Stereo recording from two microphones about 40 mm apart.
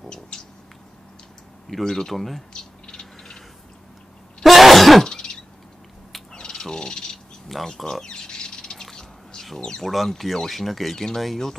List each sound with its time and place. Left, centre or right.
0.3 s cat: centre
1.9 s speech: centre
2.5 s bird: centre
4.4 s sneeze: centre
5.0 s throat clearing: left
6.5 s bird: centre
8.9 s drip: centre
9.6 s speech: left
9.8 s speech: centre